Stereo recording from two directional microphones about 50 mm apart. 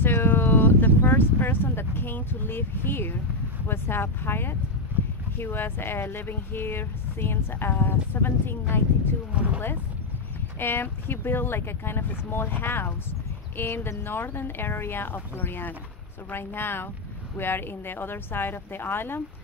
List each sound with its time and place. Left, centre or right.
0.0 s a sound: left
1.0 s speech: left
10.6 s speech: left